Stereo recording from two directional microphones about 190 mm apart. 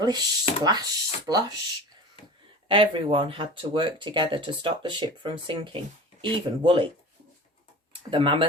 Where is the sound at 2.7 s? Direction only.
25° right (ahead or behind).